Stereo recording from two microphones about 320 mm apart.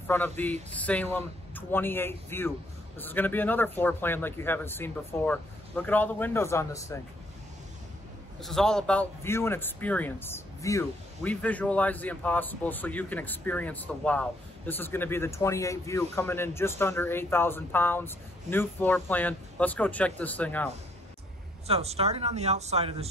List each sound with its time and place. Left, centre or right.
0.0 s speech: centre
8.4 s a man's voice: centre
21.6 s speech: centre